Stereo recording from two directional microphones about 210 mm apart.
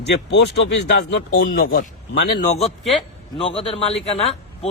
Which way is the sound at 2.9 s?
Centre (ahead or behind).